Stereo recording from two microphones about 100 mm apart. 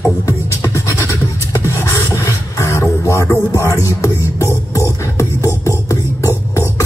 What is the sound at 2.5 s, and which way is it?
Music, 30° left (ahead or behind).